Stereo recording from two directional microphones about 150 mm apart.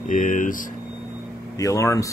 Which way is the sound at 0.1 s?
60° left (ahead or behind).